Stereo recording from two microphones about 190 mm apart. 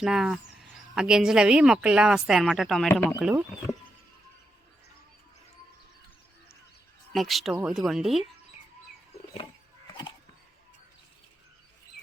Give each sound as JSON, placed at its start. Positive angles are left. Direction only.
{"t": 0.0, "sound": "speech", "side_deg": -5}
{"t": 3.2, "sound": "speech", "side_deg": -5}
{"t": 7.1, "sound": "speech", "side_deg": 0}
{"t": 9.3, "sound": "a sound", "side_deg": 20}